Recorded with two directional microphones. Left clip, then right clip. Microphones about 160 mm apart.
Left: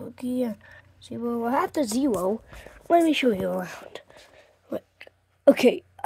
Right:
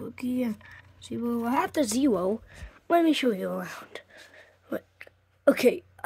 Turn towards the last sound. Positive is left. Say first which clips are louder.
# left 4 dB
turn(degrees=10)  # may be behind; listen again after turning